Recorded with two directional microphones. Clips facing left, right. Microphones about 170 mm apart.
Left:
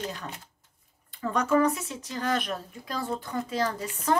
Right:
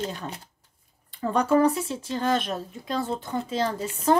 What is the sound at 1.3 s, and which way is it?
Speech, 30° right (ahead or behind).